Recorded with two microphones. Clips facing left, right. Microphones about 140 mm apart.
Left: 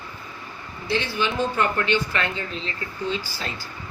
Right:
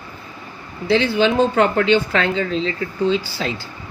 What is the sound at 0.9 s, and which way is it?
A woman's voice, 75° right (ahead or behind).